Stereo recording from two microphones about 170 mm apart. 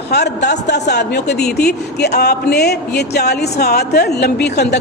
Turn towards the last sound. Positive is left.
turn(degrees=80)